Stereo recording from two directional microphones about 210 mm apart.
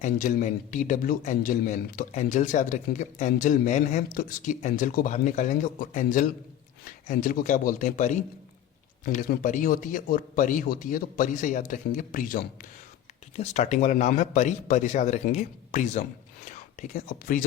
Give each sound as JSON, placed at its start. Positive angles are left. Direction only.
{"t": 0.0, "sound": "a man's voice", "side_deg": 40}